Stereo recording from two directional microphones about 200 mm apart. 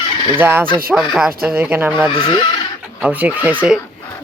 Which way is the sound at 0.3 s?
10° right (ahead or behind).